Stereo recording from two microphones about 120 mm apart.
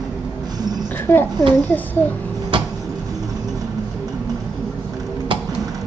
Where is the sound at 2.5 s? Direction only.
45° right (ahead or behind).